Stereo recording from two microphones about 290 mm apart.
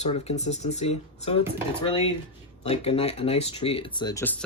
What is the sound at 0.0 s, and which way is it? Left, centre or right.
Speech, left.